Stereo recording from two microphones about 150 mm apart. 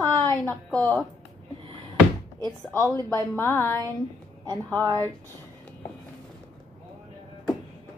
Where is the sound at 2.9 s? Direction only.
20° left (ahead or behind).